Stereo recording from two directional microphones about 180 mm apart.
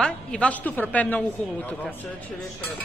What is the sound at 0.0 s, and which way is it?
A woman's voice, 5° left (ahead or behind).